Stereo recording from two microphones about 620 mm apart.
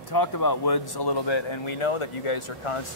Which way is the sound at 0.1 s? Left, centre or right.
Left.